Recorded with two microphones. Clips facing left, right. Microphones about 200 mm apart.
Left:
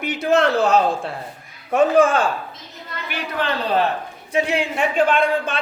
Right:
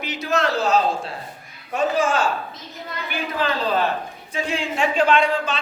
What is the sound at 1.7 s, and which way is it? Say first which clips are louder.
Speech: left 6 dB; 55° left (ahead or behind).